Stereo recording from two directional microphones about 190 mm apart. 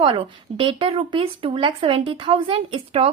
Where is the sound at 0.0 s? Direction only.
30° right (ahead or behind).